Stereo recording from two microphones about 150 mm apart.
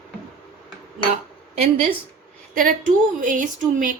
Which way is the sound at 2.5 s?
65° right (ahead or behind).